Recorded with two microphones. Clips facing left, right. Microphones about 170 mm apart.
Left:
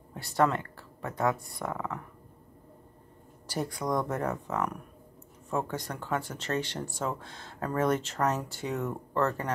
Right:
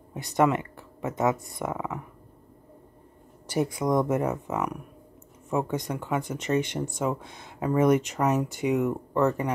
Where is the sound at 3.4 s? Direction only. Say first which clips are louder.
Right 6 dB; 20° right (ahead or behind).